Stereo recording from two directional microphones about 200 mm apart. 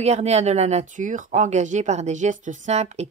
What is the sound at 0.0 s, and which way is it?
Speech, 35° right (ahead or behind).